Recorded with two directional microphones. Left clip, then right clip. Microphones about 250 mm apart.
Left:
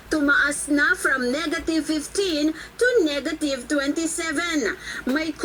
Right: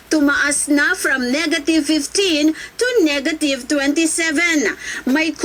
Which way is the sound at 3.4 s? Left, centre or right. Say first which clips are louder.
Right 4 dB; right.